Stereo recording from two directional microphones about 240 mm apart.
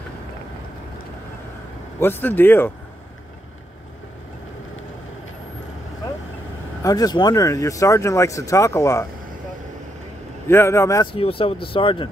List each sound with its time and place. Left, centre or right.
2.0 s speech: centre
6.8 s speech: centre
10.5 s speech: centre
11.1 s speech: left